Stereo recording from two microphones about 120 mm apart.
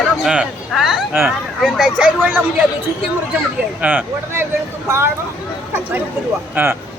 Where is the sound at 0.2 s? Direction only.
5° right (ahead or behind).